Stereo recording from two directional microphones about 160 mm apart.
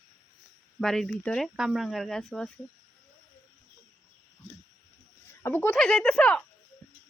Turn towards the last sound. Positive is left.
turn(degrees=5)  # may be behind; listen again after turning